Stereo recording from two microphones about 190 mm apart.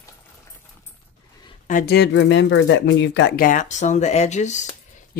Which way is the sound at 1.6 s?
50° left (ahead or behind).